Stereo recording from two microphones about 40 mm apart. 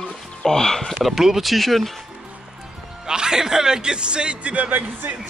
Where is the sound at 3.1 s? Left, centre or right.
Centre.